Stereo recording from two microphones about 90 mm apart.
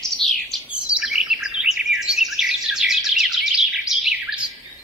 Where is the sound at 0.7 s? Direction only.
15° right (ahead or behind).